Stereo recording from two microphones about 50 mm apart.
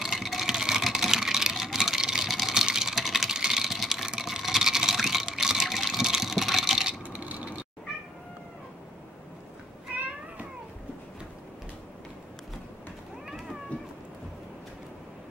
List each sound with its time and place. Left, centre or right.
0.0 s a sound: centre
6.9 s coin: right
9.9 s cat: right